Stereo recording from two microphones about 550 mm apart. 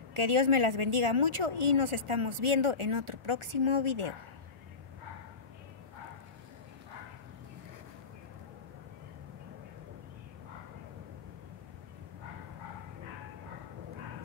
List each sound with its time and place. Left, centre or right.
0.1 s speech: right